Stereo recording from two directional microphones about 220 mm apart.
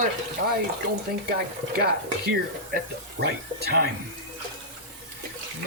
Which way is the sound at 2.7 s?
45° right (ahead or behind).